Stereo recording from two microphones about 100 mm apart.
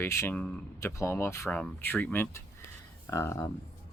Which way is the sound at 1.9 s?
15° left (ahead or behind).